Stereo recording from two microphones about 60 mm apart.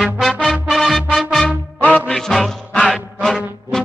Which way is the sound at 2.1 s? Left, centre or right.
Centre.